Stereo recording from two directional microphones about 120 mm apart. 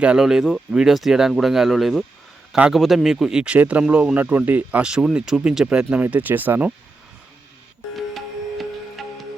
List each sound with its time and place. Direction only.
0.0 s speech: 5° right (ahead or behind)
7.9 s music: centre (ahead or behind)